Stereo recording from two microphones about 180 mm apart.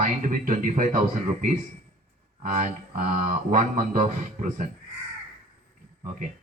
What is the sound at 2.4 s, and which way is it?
A man's voice, 45° right (ahead or behind).